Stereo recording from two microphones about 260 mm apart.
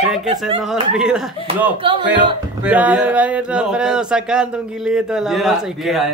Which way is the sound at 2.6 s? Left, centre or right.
Centre.